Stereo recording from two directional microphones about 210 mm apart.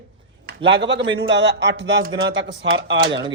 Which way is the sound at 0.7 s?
55° right (ahead or behind).